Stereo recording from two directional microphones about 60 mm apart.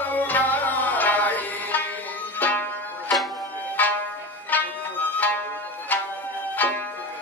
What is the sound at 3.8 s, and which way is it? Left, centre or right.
Music, left.